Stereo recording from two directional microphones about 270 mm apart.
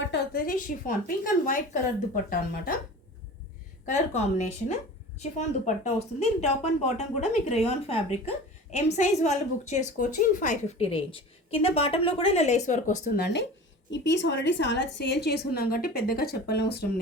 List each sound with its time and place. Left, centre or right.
0.0 s a woman's voice: left
3.8 s a woman's voice: left